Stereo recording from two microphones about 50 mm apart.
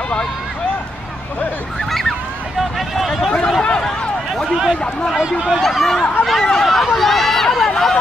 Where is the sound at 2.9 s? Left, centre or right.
Centre.